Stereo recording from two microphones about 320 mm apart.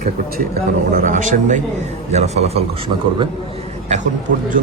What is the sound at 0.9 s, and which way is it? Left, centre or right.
A man's voice, right.